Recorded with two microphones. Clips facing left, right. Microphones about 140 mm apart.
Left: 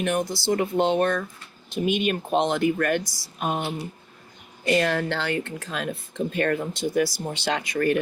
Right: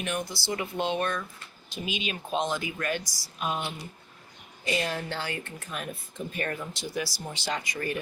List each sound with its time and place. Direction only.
0.0 s speech: 50° left (ahead or behind)
4.6 s speech: 60° left (ahead or behind)